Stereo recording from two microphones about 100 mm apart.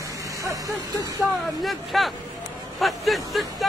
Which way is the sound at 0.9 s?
35° right (ahead or behind).